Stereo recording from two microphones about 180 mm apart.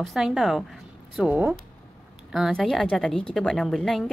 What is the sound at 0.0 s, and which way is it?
A woman's voice, centre (ahead or behind).